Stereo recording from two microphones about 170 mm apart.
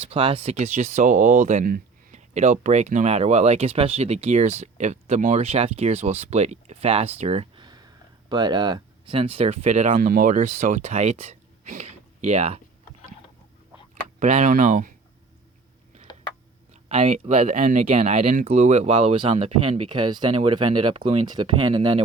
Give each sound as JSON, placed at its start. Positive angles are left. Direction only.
{"t": 0.0, "sound": "speech", "side_deg": -35}
{"t": 13.9, "sound": "speech", "side_deg": -40}
{"t": 16.9, "sound": "speech", "side_deg": -40}
{"t": 17.8, "sound": "speech", "side_deg": -35}